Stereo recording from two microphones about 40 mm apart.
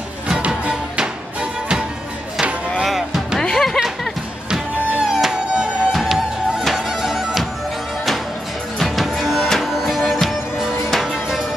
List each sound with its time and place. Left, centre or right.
0.7 s music: right
2.8 s music: centre
3.3 s music: centre
4.5 s music: centre
5.9 s music: centre
8.7 s music: centre